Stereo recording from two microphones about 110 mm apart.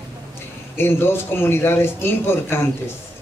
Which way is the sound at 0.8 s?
20° left (ahead or behind).